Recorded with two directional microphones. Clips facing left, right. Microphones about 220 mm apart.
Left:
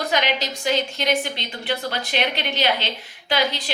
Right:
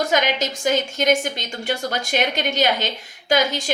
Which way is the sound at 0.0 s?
45° right (ahead or behind).